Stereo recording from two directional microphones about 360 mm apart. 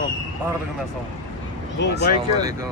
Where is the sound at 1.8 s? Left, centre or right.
Left.